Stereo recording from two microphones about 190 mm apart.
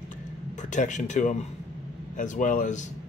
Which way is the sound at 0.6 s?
40° left (ahead or behind).